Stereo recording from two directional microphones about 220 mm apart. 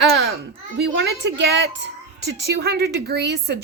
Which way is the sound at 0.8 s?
55° right (ahead or behind).